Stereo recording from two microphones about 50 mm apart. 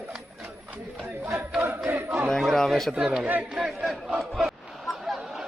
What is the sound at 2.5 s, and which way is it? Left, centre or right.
Speech, centre.